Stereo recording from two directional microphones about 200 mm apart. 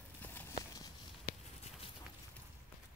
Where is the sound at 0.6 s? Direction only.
20° left (ahead or behind).